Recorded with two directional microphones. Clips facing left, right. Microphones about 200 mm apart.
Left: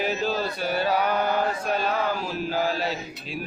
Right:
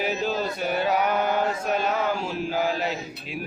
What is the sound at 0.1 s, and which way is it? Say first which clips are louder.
Mantra: even; 15° right (ahead or behind).